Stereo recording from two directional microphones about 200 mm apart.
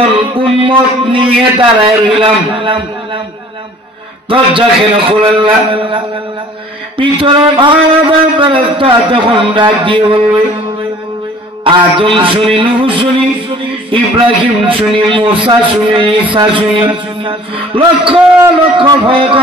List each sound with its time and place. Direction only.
0.2 s a man's voice: 25° right (ahead or behind)
4.3 s a man's voice: 25° right (ahead or behind)
11.6 s a man's voice: 25° right (ahead or behind)